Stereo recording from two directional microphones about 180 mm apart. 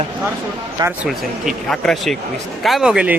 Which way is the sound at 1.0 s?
Centre (ahead or behind).